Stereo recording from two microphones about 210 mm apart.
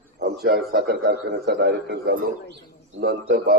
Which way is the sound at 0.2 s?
45° right (ahead or behind).